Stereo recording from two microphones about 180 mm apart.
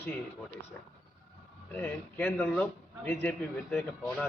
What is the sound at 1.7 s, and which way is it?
A man's voice, 10° left (ahead or behind).